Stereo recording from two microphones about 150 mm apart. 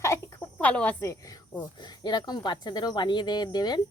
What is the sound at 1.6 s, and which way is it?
Speech, 25° left (ahead or behind).